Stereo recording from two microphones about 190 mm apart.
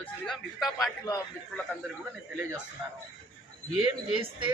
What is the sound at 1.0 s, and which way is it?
Speech, 20° left (ahead or behind).